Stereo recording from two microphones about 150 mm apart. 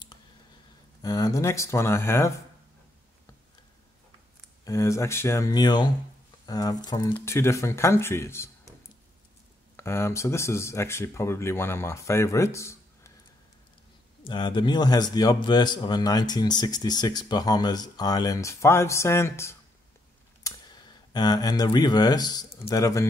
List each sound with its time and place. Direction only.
1.0 s a man's voice: 25° left (ahead or behind)
4.6 s a man's voice: 20° left (ahead or behind)
7.2 s speech: 15° left (ahead or behind)
9.8 s speech: 15° left (ahead or behind)
14.2 s a man's voice: 30° left (ahead or behind)
20.4 s speech: 30° left (ahead or behind)